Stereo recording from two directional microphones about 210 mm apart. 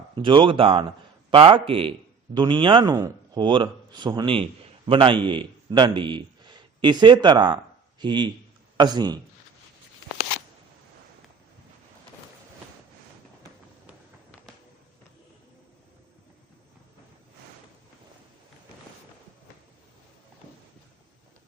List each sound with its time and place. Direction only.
0.2 s speech: 25° right (ahead or behind)